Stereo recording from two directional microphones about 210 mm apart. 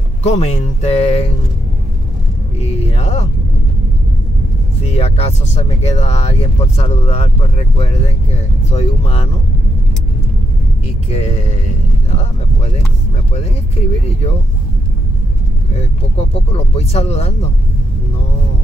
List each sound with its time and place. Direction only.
0.2 s speech: 30° left (ahead or behind)
2.6 s speech: 30° left (ahead or behind)
4.8 s speech: 30° left (ahead or behind)
11.1 s speech: 30° left (ahead or behind)
16.2 s speech: 30° left (ahead or behind)